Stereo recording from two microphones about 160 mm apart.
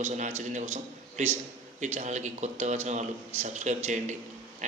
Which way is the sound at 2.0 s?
50° right (ahead or behind).